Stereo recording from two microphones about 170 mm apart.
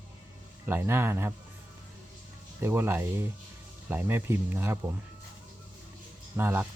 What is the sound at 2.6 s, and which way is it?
Speech, 15° right (ahead or behind).